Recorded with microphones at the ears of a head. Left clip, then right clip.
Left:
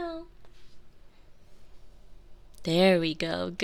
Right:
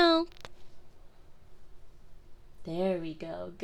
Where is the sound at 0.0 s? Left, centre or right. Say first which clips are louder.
Right 13 dB; right.